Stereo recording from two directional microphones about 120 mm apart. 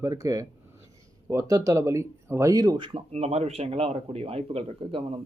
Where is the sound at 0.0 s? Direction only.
30° right (ahead or behind).